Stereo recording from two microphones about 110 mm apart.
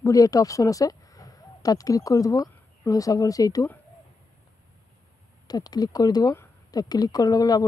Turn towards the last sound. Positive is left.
turn(degrees=35)  # may be behind; listen again after turning